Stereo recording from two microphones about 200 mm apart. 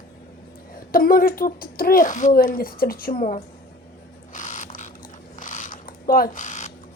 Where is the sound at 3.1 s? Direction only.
30° left (ahead or behind).